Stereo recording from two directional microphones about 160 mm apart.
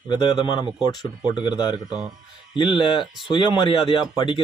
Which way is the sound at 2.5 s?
30° left (ahead or behind).